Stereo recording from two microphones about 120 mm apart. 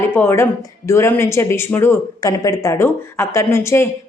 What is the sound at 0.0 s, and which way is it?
A woman's voice, 20° left (ahead or behind).